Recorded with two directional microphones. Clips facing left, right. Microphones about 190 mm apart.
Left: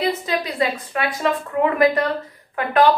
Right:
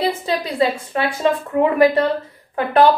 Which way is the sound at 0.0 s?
30° right (ahead or behind).